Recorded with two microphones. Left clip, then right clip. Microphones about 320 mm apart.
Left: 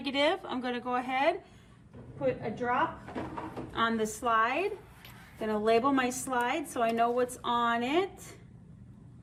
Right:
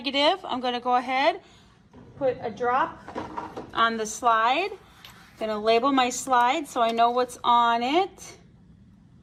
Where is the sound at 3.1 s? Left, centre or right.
Right.